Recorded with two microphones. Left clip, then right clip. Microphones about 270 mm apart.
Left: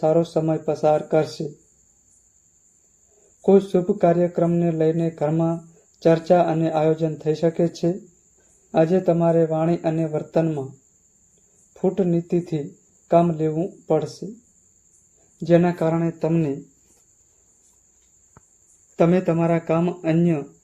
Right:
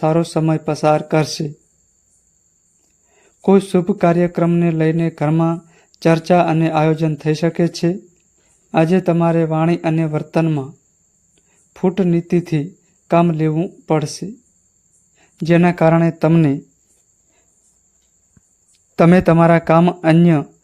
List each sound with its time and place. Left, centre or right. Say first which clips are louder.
0.0 s mantra: right 2 dB; right
3.4 s mantra: right 3 dB; right
11.7 s mantra: right 4 dB; right
15.4 s mantra: right 4 dB; right
18.9 s mantra: right 7 dB; right